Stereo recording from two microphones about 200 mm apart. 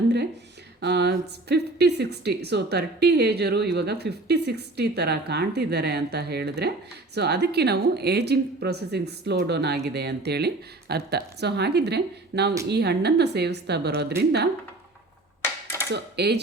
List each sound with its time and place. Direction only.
0.8 s a woman's voice: 55° right (ahead or behind)
15.6 s a sound: 15° left (ahead or behind)
15.9 s a woman's voice: 55° right (ahead or behind)